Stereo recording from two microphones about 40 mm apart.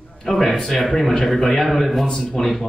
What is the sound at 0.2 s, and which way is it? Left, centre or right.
A man's voice, centre.